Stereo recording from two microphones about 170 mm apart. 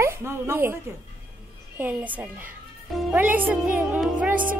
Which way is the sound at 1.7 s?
10° right (ahead or behind).